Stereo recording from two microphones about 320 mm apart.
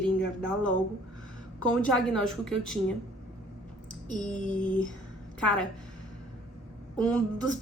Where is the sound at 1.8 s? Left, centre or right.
Centre.